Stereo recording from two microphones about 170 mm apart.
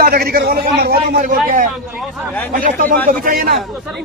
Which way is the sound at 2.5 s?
55° right (ahead or behind).